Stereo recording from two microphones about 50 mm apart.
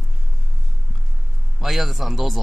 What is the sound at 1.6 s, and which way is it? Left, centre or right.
Speech, centre.